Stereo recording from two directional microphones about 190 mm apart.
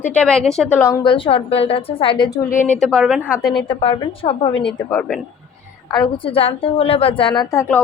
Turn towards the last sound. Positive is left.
turn(degrees=15)  # may be behind; listen again after turning